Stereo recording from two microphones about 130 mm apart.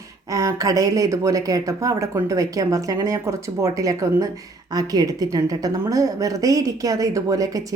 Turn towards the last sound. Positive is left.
turn(degrees=-25)  # may be behind; listen again after turning